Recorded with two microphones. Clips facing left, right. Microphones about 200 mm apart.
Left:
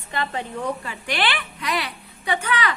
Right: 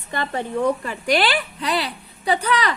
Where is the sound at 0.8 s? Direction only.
40° right (ahead or behind).